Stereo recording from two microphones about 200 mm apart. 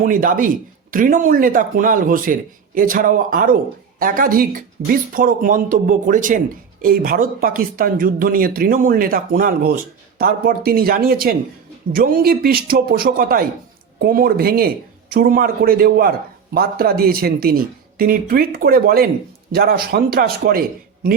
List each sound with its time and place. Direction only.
0.0 s speech: 40° right (ahead or behind)